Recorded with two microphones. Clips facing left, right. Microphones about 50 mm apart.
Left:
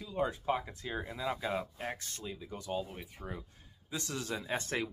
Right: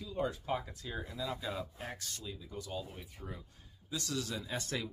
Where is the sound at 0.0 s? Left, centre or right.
Left.